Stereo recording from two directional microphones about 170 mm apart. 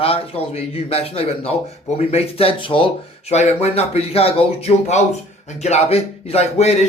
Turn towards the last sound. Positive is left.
turn(degrees=40)  # may be behind; listen again after turning